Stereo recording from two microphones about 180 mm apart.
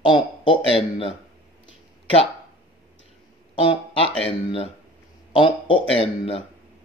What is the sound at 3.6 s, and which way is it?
Speech, 30° left (ahead or behind).